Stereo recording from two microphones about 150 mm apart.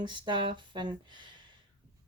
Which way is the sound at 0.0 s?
30° right (ahead or behind).